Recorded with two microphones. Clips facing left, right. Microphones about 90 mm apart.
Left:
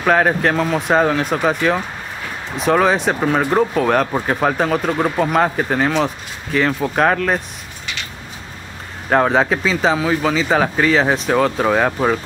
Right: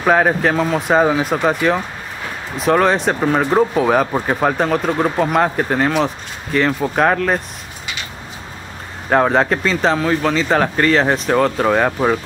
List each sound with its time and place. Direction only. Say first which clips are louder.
0.0 s speech: right 1 dB; 5° right (ahead or behind)
9.1 s speech: right 1 dB; centre (ahead or behind)